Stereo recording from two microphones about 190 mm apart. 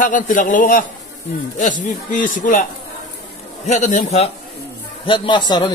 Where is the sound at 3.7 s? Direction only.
40° left (ahead or behind).